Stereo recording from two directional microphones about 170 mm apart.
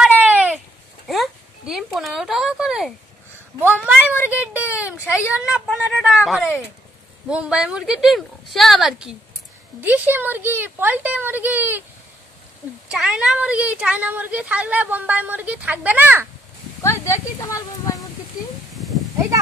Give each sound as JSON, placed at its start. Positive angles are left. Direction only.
{"t": 0.0, "sound": "a sound", "side_deg": -5}
{"t": 3.6, "sound": "speech", "side_deg": -10}
{"t": 12.9, "sound": "speech", "side_deg": -5}
{"t": 16.8, "sound": "speech", "side_deg": 15}